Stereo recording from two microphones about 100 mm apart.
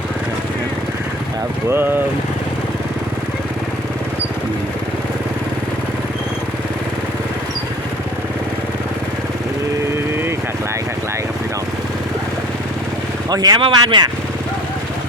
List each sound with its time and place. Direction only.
13.3 s speech: 40° right (ahead or behind)
13.6 s speech: 55° right (ahead or behind)